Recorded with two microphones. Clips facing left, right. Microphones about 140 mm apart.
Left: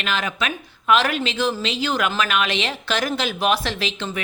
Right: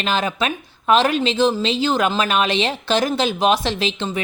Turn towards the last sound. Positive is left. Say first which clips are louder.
# right 4 dB
turn(degrees=-25)  # may be behind; listen again after turning